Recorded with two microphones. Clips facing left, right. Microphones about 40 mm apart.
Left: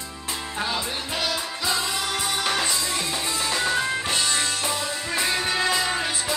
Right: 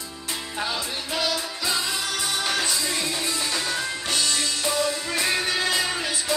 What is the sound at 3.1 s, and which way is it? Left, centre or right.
Music, centre.